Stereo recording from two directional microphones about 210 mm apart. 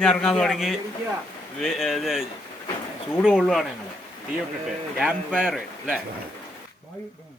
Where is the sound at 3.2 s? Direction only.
Centre (ahead or behind).